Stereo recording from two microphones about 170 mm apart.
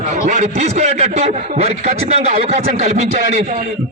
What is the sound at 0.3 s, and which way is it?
A man's voice, 40° right (ahead or behind).